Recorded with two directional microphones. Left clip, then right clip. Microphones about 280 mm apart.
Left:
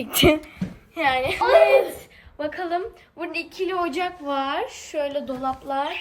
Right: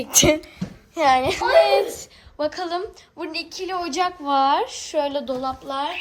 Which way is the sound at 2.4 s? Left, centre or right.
Centre.